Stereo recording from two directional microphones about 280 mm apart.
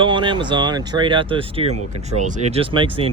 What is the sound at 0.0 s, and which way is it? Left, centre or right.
Speech, centre.